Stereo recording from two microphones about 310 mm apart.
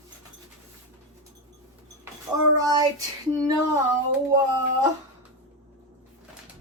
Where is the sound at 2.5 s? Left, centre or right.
Centre.